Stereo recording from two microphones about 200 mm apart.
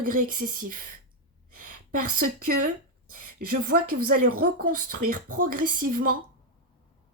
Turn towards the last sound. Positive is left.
turn(degrees=-45)  # may be behind; listen again after turning